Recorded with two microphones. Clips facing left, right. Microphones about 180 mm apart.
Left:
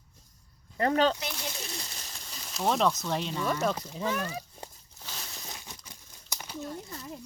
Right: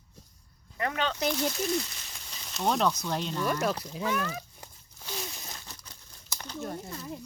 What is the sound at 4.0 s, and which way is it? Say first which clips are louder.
Speech: right 1 dB; 35° left (ahead or behind).